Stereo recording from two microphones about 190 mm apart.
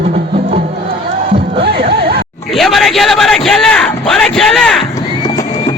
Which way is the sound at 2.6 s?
Centre (ahead or behind).